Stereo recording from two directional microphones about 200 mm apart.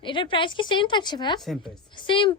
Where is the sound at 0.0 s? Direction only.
25° left (ahead or behind).